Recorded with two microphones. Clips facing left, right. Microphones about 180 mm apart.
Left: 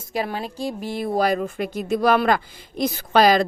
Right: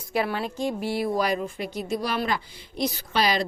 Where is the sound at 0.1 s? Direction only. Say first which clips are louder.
Even; 40° left (ahead or behind).